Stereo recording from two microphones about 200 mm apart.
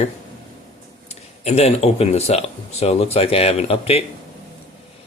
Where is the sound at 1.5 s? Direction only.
30° left (ahead or behind).